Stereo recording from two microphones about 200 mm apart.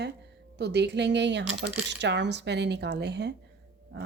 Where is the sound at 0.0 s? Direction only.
55° right (ahead or behind).